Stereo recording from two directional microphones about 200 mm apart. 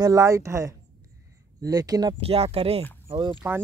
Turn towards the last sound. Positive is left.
turn(degrees=-25)  # may be behind; listen again after turning